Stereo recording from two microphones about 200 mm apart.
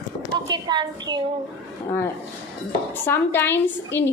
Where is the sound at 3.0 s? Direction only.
10° left (ahead or behind).